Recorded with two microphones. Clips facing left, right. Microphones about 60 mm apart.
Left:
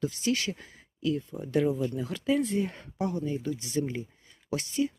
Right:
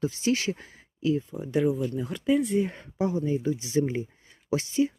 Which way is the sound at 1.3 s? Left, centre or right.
Centre.